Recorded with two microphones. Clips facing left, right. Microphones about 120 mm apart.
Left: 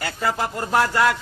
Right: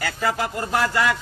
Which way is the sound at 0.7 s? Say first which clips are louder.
Left 3 dB; 40° left (ahead or behind).